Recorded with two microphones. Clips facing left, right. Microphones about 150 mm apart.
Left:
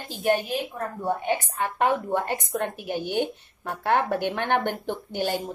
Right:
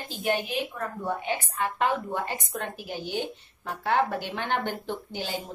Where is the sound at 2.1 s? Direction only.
55° left (ahead or behind).